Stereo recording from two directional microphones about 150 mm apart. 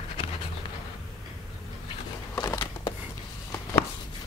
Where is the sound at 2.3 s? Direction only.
25° left (ahead or behind).